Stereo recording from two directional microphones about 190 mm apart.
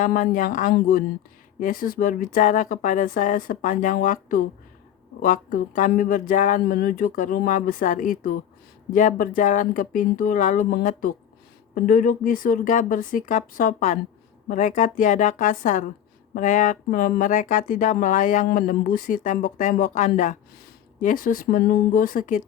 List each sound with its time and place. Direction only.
0.0 s speech: 45° left (ahead or behind)
6.6 s speech: 50° left (ahead or behind)